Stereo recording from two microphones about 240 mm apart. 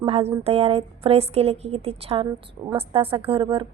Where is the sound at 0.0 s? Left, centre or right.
Right.